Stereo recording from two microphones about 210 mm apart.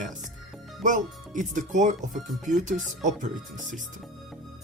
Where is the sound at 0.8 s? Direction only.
35° right (ahead or behind).